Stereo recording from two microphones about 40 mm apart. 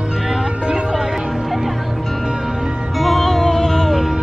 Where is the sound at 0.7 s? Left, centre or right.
Centre.